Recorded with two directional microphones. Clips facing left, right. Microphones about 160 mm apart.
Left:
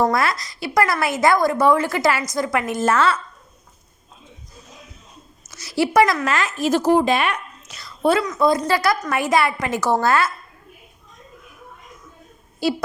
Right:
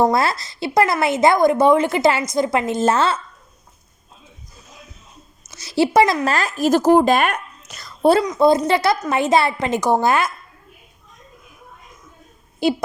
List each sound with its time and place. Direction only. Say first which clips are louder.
0.0 s a woman's voice: right 2 dB; 30° right (ahead or behind)
5.5 s speech: right 3 dB; 25° right (ahead or behind); by 8.2 s 40° right (ahead or behind)
8.4 s a woman's voice: right 3 dB; 25° right (ahead or behind)
12.6 s a woman's voice: right 3 dB; 20° right (ahead or behind)